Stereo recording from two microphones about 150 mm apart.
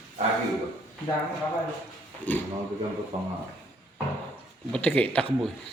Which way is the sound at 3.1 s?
40° right (ahead or behind).